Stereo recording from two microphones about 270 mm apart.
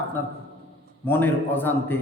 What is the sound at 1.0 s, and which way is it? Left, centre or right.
Speech, centre.